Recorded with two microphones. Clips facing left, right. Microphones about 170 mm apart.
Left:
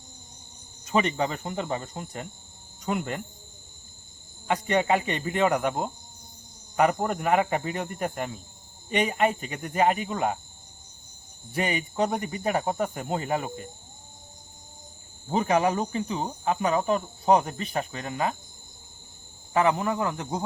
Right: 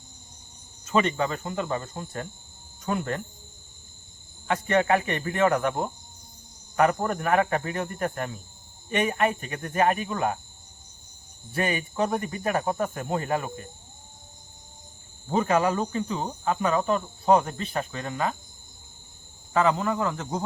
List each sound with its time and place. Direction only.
0.9 s speech: 15° left (ahead or behind)
4.4 s speech: 15° left (ahead or behind)
11.5 s speech: 20° left (ahead or behind)
15.3 s speech: 15° left (ahead or behind)
19.5 s speech: 15° left (ahead or behind)